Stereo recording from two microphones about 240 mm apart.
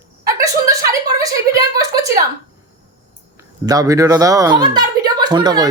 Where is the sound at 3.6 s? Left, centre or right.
Centre.